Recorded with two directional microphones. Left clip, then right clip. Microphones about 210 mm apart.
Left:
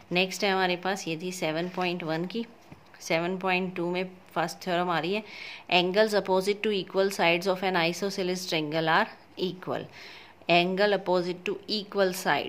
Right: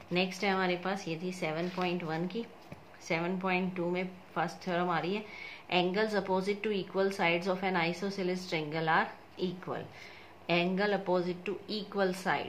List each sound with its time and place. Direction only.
0.1 s speech: 50° left (ahead or behind)